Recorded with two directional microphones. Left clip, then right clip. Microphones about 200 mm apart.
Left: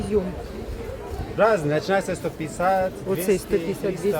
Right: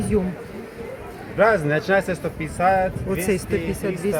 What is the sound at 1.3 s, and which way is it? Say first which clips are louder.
Speech: right 2 dB; 40° right (ahead or behind).